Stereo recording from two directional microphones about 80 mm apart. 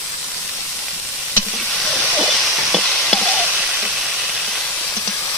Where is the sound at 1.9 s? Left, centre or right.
Centre.